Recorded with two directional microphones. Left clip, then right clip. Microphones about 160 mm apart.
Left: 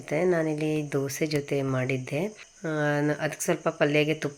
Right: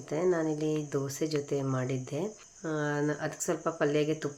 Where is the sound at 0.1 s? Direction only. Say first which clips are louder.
Left 4 dB; 25° left (ahead or behind).